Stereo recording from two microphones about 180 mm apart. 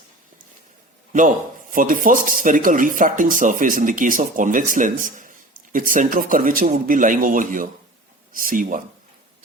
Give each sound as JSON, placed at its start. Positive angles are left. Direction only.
{"t": 1.7, "sound": "speech", "side_deg": -50}